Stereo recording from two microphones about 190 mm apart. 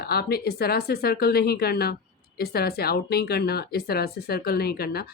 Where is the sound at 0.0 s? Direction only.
55° left (ahead or behind).